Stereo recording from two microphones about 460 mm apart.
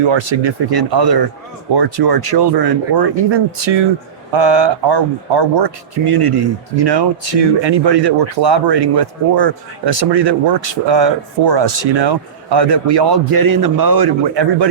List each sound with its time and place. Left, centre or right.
0.0 s a man's voice: right